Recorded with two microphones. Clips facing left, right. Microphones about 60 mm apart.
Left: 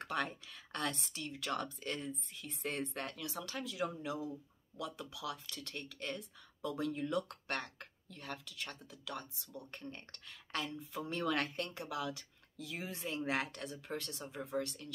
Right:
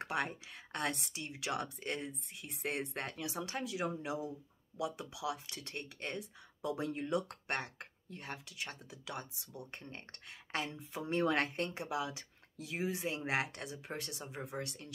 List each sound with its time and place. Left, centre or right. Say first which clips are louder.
0.0 s speech: right 1 dB; centre
1.3 s speech: right 1 dB; centre
6.1 s speech: right 3 dB; centre
6.8 s speech: left 4 dB; right
7.1 s speech: right 1 dB; right
9.8 s speech: left 1 dB; right